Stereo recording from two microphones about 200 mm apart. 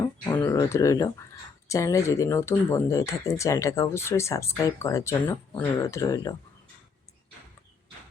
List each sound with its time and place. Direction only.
0.0 s speech: 15° left (ahead or behind)